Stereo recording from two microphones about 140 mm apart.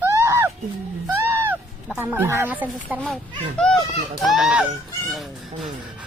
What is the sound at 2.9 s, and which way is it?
Speech, 10° right (ahead or behind).